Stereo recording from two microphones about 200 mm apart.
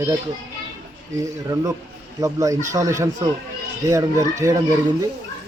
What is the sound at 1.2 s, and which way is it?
Speech, 15° right (ahead or behind).